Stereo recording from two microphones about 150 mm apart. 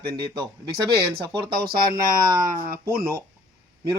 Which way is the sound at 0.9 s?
90° right.